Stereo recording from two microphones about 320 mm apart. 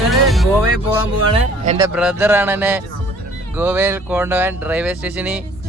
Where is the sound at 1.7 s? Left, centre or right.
Centre.